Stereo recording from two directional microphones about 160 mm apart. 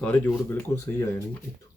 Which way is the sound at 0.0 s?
10° left (ahead or behind).